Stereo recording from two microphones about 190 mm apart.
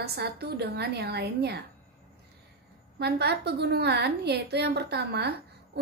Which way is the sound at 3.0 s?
60° right (ahead or behind).